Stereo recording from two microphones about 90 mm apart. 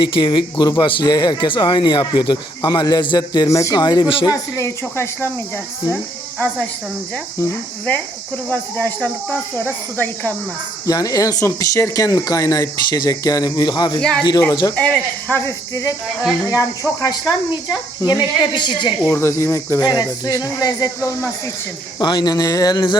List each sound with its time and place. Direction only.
0.0 s speech: 60° left (ahead or behind)
4.3 s speech: 35° left (ahead or behind)
8.4 s speech: 15° left (ahead or behind)
10.8 s speech: 40° left (ahead or behind)
14.0 s speech: 10° left (ahead or behind)
15.4 s speech: 35° left (ahead or behind); by 18.9 s 60° left (ahead or behind)
19.1 s speech: 30° left (ahead or behind)
19.8 s speech: 45° left (ahead or behind)
21.9 s speech: 50° left (ahead or behind)